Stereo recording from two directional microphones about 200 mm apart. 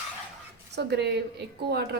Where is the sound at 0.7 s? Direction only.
60° right (ahead or behind).